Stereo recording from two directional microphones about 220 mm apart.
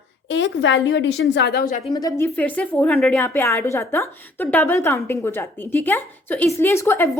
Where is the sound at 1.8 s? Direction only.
20° left (ahead or behind).